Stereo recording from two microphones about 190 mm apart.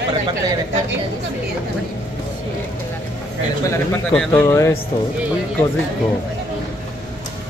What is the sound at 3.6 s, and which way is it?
Speech, 15° left (ahead or behind).